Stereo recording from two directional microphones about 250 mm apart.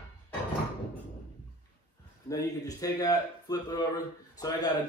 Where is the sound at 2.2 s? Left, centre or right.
Centre.